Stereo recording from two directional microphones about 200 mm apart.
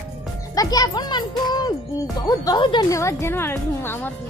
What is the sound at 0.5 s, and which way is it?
A child's voice, 20° left (ahead or behind).